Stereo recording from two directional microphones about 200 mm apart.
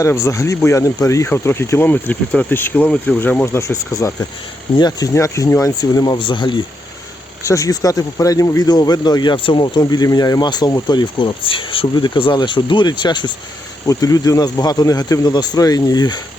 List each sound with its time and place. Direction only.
0.0 s speech: 15° left (ahead or behind)